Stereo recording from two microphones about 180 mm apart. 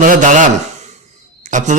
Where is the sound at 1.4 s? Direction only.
45° right (ahead or behind).